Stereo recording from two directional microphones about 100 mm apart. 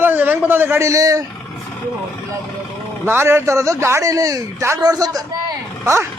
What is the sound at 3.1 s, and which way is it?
A man's voice, 25° right (ahead or behind).